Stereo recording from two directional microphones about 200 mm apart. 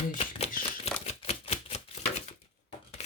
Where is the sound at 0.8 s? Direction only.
30° left (ahead or behind).